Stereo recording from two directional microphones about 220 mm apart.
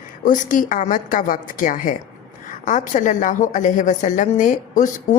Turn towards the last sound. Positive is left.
turn(degrees=35)  # may be behind; listen again after turning